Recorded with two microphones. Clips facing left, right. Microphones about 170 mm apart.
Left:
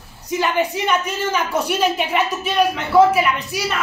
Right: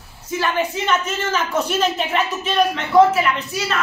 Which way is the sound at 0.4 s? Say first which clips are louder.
Left 2 dB; 15° left (ahead or behind).